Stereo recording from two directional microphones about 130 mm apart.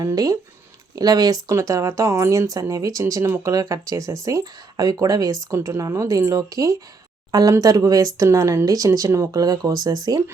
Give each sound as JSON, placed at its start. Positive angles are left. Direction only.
{"t": 0.0, "sound": "speech", "side_deg": -25}